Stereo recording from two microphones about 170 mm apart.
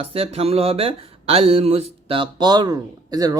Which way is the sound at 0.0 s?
35° right (ahead or behind).